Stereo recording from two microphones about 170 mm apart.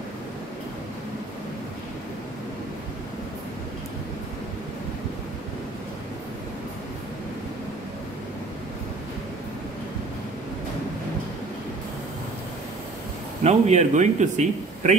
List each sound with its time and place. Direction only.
13.4 s speech: 40° right (ahead or behind)